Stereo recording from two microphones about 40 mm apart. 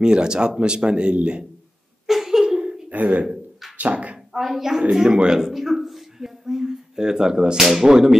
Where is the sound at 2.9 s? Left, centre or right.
Right.